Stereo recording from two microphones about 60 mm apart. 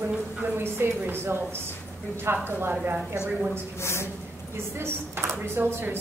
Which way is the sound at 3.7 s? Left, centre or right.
Left.